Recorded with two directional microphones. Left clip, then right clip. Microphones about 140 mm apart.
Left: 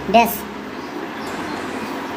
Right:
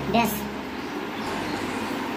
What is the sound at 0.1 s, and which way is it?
Speech, 40° left (ahead or behind).